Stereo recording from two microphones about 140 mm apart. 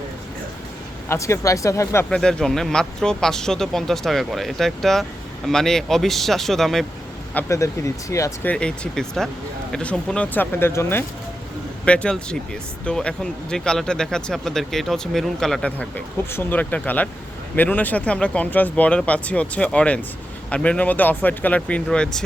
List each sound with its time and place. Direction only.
1.0 s speech: 20° left (ahead or behind)
2.0 s speech: 5° left (ahead or behind)
7.3 s speech: 20° left (ahead or behind)
8.4 s speech: 5° left (ahead or behind)
11.9 s speech: 5° left (ahead or behind)